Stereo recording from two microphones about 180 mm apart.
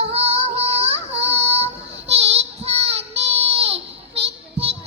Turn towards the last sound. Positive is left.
turn(degrees=-35)  # may be behind; listen again after turning